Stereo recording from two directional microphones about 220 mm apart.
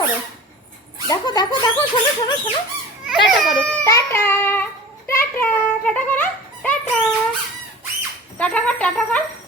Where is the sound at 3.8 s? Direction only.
15° left (ahead or behind).